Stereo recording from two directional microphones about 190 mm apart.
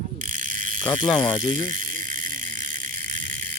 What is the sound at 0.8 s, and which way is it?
Speech, 25° left (ahead or behind).